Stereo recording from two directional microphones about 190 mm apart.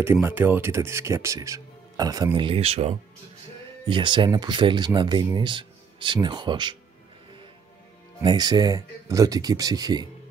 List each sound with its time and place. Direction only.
0.0 s speech: 10° right (ahead or behind)
8.2 s speech: 25° right (ahead or behind)